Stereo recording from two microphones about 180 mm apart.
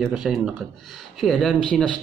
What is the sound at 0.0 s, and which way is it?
Speech, centre (ahead or behind).